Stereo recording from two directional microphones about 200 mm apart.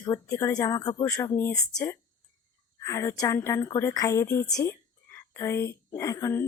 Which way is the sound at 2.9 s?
15° left (ahead or behind).